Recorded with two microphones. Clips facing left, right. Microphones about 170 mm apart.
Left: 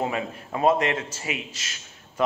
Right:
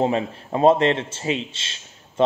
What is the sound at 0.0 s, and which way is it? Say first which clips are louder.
A man's voice: right 6 dB; 30° right (ahead or behind).